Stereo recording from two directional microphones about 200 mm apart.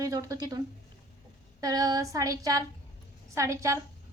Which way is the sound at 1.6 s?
15° right (ahead or behind).